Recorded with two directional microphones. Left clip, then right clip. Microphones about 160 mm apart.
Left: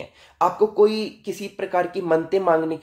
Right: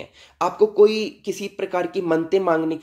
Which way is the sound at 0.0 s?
30° right (ahead or behind).